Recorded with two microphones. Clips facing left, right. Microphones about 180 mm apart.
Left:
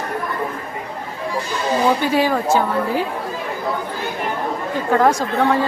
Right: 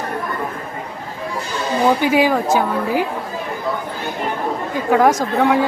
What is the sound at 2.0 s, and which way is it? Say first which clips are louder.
Speech: right 2 dB; 15° right (ahead or behind).